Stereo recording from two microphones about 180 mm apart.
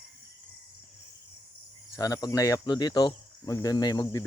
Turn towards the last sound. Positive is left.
turn(degrees=20)  # may be behind; listen again after turning